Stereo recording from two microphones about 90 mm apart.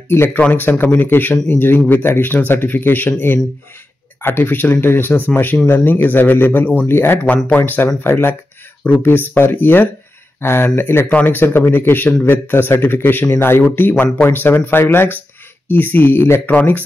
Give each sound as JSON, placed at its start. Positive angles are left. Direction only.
{"t": 0.1, "sound": "speech", "side_deg": 25}